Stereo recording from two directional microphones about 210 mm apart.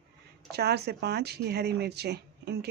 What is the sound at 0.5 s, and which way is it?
Speech, 50° right (ahead or behind).